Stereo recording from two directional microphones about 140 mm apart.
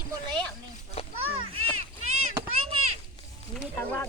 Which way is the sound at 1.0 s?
45° left (ahead or behind).